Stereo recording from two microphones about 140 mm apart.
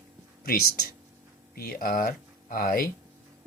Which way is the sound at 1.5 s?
90° left.